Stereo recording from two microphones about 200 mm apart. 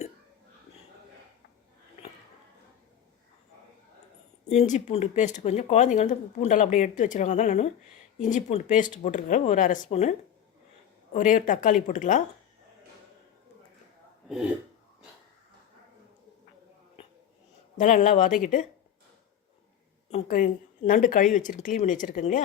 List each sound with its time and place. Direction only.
4.4 s speech: 35° left (ahead or behind)
17.7 s speech: 40° left (ahead or behind)
20.1 s speech: 35° left (ahead or behind)